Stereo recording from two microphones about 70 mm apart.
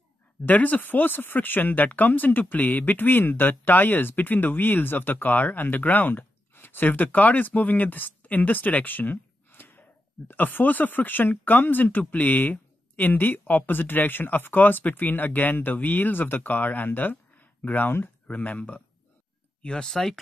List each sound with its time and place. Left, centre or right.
0.5 s speech: left; by 20.2 s centre